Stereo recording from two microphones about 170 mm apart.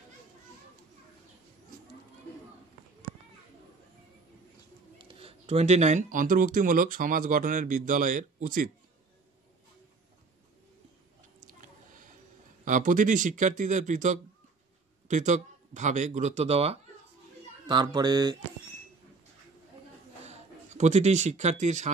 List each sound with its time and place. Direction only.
4.9 s speech: 35° right (ahead or behind); by 8.6 s 50° right (ahead or behind)
11.3 s a sound: 50° right (ahead or behind)
12.6 s speech: 50° right (ahead or behind)
17.6 s speech: 25° right (ahead or behind)
20.2 s speech: 45° right (ahead or behind)